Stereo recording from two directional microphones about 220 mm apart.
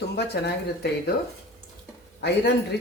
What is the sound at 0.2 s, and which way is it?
Speech, 50° left (ahead or behind).